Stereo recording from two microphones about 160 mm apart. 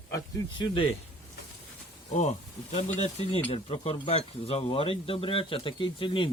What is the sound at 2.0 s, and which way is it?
Speech, 45° left (ahead or behind).